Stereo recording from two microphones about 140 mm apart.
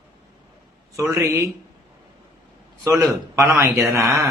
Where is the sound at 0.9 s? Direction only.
20° right (ahead or behind).